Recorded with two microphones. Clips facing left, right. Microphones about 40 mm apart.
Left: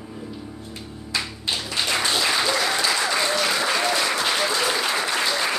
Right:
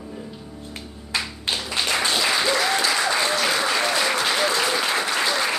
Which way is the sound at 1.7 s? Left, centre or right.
Centre.